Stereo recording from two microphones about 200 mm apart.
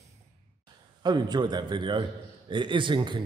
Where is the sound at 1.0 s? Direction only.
20° right (ahead or behind).